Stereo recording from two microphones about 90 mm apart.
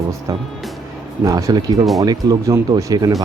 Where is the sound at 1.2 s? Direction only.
40° right (ahead or behind).